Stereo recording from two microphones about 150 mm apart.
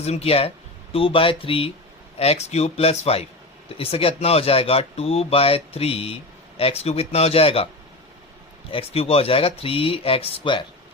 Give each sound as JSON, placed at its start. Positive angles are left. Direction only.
{"t": 0.0, "sound": "a man's voice", "side_deg": 45}
{"t": 8.7, "sound": "speech", "side_deg": 40}